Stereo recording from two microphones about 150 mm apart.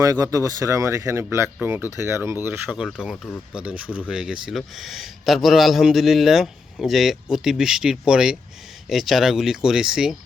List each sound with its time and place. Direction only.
0.0 s speech: 20° right (ahead or behind)
2.6 s a man's voice: 5° right (ahead or behind)